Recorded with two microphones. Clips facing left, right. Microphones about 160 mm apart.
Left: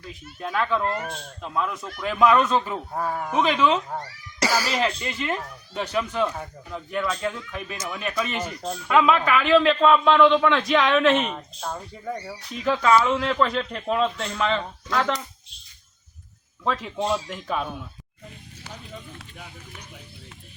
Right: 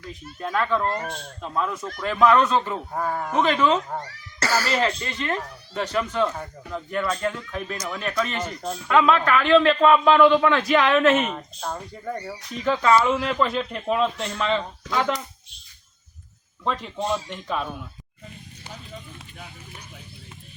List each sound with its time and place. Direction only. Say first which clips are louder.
0.3 s speech: right 1 dB; centre (ahead or behind)
0.8 s speech: right 1 dB; 35° right (ahead or behind)
1.4 s speech: right 1 dB; centre (ahead or behind)
4.4 s speech: right 1 dB; 10° left (ahead or behind); by 15.2 s 5° right (ahead or behind)
16.6 s speech: left 1 dB; centre (ahead or behind)